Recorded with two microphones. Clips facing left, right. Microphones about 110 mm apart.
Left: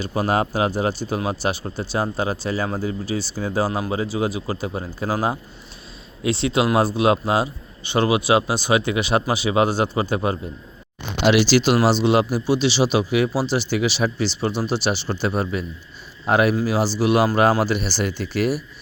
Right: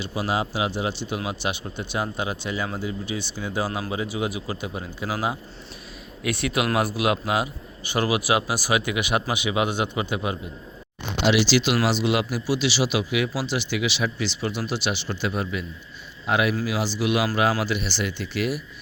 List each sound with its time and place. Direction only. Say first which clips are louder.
0.0 s speech: left 5 dB; 45° left (ahead or behind)
6.2 s speech: left 5 dB; 25° left (ahead or behind)
11.2 s speech: left 4 dB; 50° left (ahead or behind)